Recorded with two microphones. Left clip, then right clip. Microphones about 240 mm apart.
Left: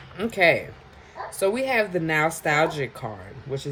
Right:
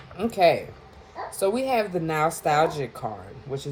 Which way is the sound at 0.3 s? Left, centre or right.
Left.